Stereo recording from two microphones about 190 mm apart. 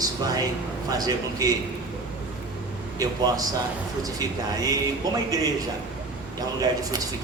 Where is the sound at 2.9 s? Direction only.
20° right (ahead or behind).